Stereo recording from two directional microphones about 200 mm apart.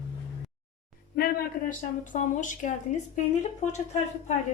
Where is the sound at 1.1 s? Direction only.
50° left (ahead or behind).